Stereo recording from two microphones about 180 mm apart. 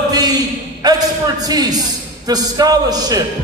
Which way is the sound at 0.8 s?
20° right (ahead or behind).